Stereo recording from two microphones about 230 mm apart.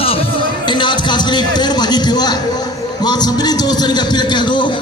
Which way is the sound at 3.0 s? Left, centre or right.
Centre.